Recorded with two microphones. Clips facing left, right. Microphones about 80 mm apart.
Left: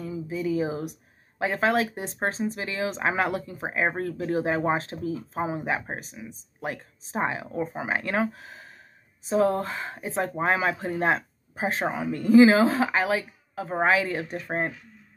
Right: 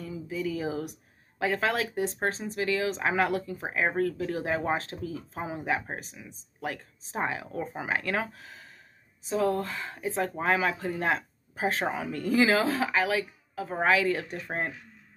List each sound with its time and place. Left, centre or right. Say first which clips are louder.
0.0 s speech: left 3 dB; left